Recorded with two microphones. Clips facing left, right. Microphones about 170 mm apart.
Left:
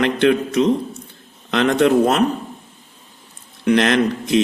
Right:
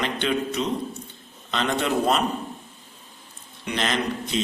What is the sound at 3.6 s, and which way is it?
Speech, 75° left (ahead or behind).